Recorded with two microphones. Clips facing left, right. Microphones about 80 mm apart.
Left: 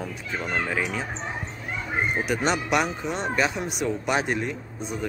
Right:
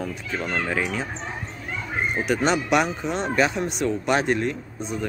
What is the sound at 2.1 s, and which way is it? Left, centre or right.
Speech, centre.